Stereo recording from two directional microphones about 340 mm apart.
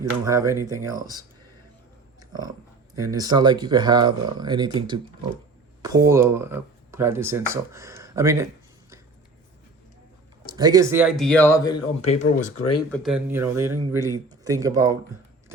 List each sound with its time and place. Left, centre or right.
0.3 s speech: centre
3.0 s speech: centre
10.4 s speech: centre
12.9 s speech: centre